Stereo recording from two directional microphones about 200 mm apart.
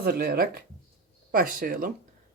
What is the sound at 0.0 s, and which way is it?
Speech, 50° right (ahead or behind).